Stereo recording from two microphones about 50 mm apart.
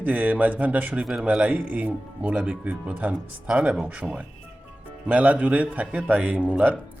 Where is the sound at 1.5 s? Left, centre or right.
Right.